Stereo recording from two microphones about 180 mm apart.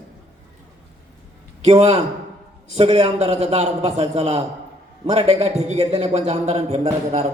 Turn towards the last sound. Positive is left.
turn(degrees=-35)  # may be behind; listen again after turning